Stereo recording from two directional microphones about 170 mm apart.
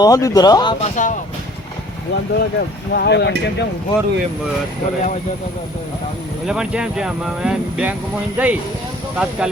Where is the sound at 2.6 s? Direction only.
75° left (ahead or behind).